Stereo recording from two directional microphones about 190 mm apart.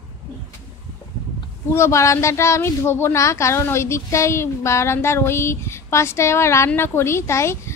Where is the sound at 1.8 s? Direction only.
15° left (ahead or behind).